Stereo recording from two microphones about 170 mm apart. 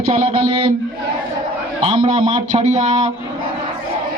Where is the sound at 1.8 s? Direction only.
35° right (ahead or behind).